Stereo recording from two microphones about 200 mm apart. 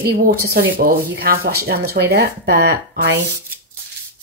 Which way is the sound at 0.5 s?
45° right (ahead or behind).